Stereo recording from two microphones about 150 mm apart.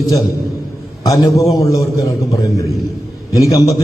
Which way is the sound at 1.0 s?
25° left (ahead or behind).